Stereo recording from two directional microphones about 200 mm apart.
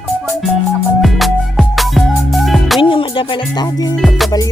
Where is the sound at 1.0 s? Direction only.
Centre (ahead or behind).